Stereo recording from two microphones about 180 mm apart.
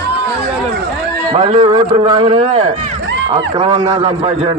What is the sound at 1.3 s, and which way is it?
A man's voice, 25° right (ahead or behind).